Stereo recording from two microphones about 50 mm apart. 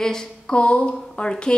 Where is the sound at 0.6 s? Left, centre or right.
Left.